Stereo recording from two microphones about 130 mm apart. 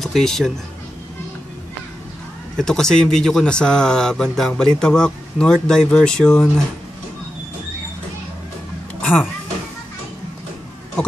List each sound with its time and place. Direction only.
0.0 s speech: 5° left (ahead or behind)
2.5 s speech: 5° left (ahead or behind)
9.0 s a sound: 5° left (ahead or behind)